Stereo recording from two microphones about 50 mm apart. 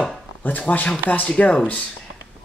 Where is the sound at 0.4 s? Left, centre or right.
Left.